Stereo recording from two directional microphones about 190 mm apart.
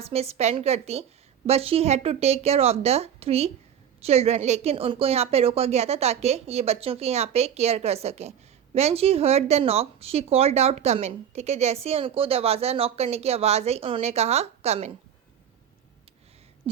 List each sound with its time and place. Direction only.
0.0 s a woman's voice: 30° right (ahead or behind)